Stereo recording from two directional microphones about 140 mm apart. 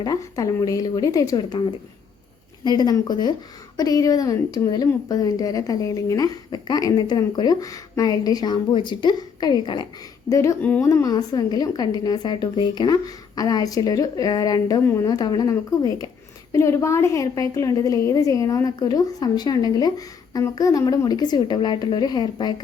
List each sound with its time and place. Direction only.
0.0 s a woman's voice: 25° left (ahead or behind)
2.6 s a woman's voice: 30° left (ahead or behind)
10.6 s a woman's voice: 10° left (ahead or behind)
10.8 s a woman's voice: 25° left (ahead or behind)